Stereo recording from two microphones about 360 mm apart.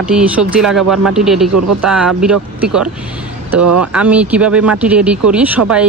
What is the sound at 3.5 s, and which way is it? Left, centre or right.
Speech, right.